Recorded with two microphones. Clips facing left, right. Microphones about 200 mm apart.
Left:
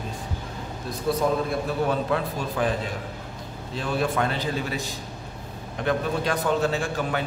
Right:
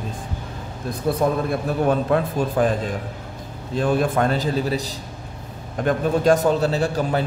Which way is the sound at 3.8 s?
45° right (ahead or behind).